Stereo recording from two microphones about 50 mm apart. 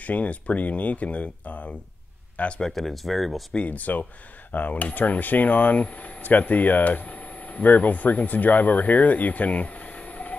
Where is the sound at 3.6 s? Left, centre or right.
Left.